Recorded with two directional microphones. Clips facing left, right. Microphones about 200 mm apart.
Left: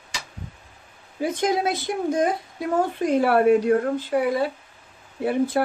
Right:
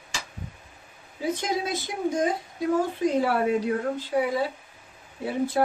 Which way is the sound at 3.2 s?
60° left (ahead or behind).